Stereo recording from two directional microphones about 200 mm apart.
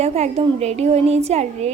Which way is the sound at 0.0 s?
30° right (ahead or behind).